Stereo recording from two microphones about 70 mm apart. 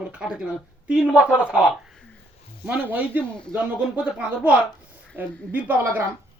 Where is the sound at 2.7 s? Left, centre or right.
Right.